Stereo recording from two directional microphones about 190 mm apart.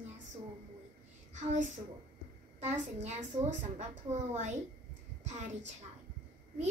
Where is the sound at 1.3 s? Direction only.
40° right (ahead or behind).